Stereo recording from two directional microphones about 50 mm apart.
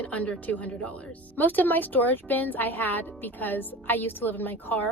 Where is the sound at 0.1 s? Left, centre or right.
Left.